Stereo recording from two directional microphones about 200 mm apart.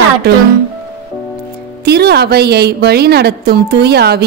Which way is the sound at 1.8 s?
55° right (ahead or behind).